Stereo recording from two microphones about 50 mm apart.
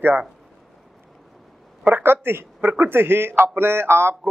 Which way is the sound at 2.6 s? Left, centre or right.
Right.